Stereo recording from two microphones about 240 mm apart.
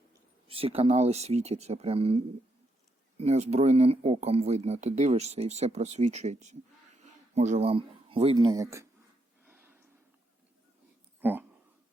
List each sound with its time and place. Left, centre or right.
0.1 s speech: right
9.5 s a sound: centre
11.2 s speech: centre